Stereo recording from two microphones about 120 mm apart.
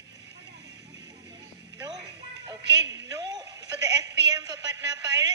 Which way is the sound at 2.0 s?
35° right (ahead or behind).